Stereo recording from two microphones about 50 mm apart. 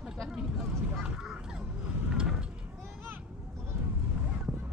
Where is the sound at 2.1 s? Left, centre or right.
Centre.